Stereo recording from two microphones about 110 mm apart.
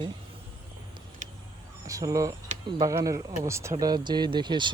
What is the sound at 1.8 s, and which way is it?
Speech, 30° right (ahead or behind).